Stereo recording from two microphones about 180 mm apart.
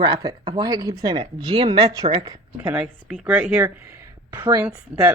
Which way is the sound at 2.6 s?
5° right (ahead or behind).